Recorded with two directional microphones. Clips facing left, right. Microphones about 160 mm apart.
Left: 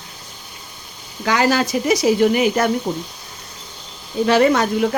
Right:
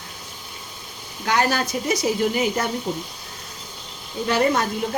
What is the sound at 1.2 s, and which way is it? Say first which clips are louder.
Speech: left 4 dB; 90° left.